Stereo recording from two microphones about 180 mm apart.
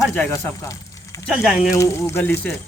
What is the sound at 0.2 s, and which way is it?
Speech, 10° left (ahead or behind).